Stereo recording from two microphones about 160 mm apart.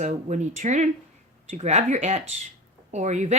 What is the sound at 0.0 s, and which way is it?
Speech, 50° right (ahead or behind).